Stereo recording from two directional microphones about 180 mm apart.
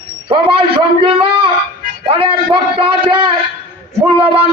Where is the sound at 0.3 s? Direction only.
30° right (ahead or behind).